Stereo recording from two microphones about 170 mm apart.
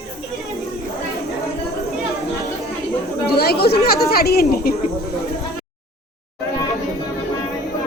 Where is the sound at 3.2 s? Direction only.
70° left (ahead or behind).